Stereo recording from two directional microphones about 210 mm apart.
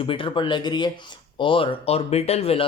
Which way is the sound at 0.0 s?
25° left (ahead or behind).